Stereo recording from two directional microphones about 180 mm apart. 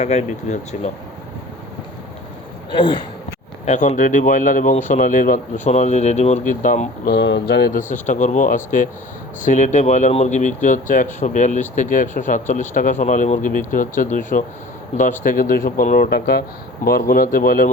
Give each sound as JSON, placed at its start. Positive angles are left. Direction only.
{"t": 0.0, "sound": "speech", "side_deg": 40}
{"t": 2.7, "sound": "speech", "side_deg": 30}
{"t": 3.7, "sound": "speech", "side_deg": 45}
{"t": 7.1, "sound": "speech", "side_deg": 80}
{"t": 16.0, "sound": "speech", "side_deg": 60}